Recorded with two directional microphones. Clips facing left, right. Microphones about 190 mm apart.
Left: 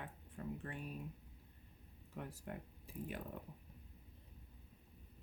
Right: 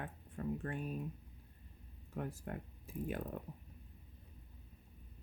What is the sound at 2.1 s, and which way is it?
Speech, 50° right (ahead or behind).